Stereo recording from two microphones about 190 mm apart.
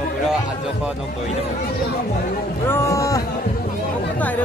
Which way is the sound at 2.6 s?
15° left (ahead or behind).